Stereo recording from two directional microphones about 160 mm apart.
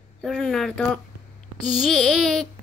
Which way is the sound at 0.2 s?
Centre (ahead or behind).